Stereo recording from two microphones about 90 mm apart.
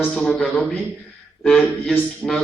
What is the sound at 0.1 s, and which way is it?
Speech, 5° left (ahead or behind).